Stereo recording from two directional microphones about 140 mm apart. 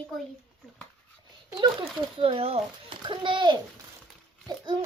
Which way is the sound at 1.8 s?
40° right (ahead or behind).